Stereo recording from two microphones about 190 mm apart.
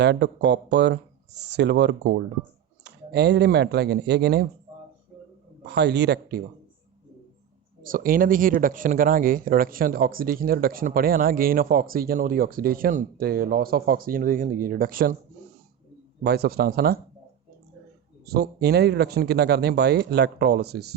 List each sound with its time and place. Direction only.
0.0 s speech: 65° right (ahead or behind)
5.6 s speech: 60° right (ahead or behind)
7.8 s speech: 45° right (ahead or behind)
16.2 s speech: 55° right (ahead or behind)
18.3 s speech: 55° right (ahead or behind)